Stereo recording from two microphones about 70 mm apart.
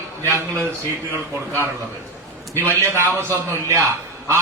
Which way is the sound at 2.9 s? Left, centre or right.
Right.